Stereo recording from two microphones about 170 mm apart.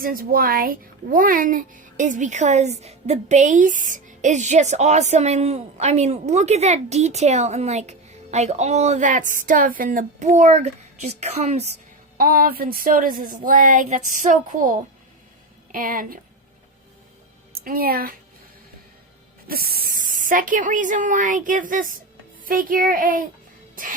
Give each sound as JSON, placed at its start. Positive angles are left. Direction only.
{"t": 0.0, "sound": "speech", "side_deg": -55}
{"t": 12.1, "sound": "speech", "side_deg": -60}
{"t": 17.5, "sound": "speech", "side_deg": -60}
{"t": 19.7, "sound": "speech", "side_deg": -50}